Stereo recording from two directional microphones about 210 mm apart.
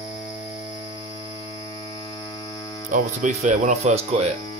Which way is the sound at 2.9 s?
35° right (ahead or behind).